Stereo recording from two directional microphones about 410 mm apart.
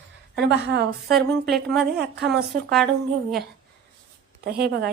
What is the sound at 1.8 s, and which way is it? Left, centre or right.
Speech, right.